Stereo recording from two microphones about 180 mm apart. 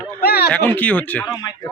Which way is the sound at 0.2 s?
60° left (ahead or behind).